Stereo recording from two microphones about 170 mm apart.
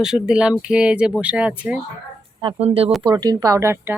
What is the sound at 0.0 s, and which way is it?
Speech, 5° right (ahead or behind).